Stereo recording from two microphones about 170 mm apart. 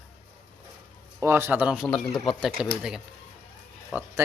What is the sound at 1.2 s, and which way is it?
Speech, 15° right (ahead or behind).